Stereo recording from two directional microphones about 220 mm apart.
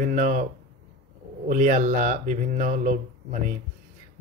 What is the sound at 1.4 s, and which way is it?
Speech, 35° right (ahead or behind).